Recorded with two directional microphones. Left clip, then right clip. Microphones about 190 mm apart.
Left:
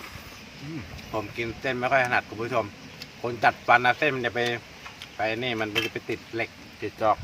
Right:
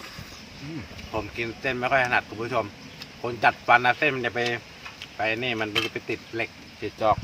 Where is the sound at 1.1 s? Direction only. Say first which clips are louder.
Even; 5° left (ahead or behind).